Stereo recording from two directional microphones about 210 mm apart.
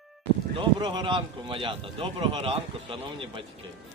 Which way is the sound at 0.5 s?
25° right (ahead or behind).